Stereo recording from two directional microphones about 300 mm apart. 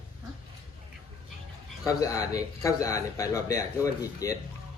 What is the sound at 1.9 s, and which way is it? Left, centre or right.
Speech, centre.